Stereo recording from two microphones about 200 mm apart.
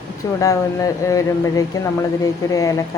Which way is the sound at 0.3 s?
15° left (ahead or behind).